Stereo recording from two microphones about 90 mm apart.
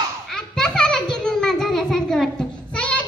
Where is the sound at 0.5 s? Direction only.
5° left (ahead or behind).